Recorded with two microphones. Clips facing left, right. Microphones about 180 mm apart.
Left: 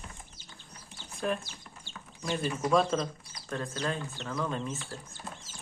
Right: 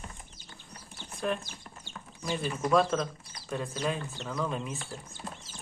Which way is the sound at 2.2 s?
Centre (ahead or behind).